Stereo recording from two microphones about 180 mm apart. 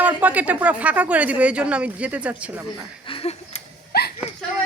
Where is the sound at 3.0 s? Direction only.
30° left (ahead or behind).